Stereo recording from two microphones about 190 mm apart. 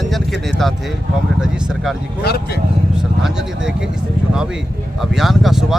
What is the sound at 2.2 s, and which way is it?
Speech, 55° left (ahead or behind).